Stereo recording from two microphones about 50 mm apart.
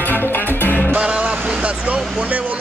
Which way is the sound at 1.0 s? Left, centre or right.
Right.